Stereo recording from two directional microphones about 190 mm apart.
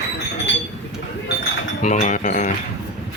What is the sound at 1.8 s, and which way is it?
Speech, 40° left (ahead or behind).